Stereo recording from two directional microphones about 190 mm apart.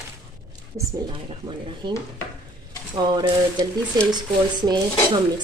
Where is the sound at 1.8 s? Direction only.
25° right (ahead or behind).